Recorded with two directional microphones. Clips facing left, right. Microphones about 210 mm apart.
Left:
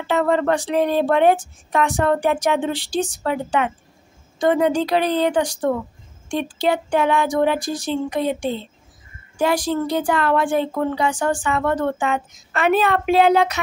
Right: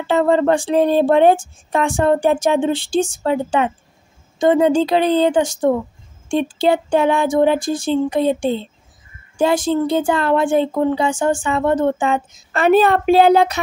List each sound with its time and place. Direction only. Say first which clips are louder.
0.0 s speech: right 4 dB; 30° right (ahead or behind)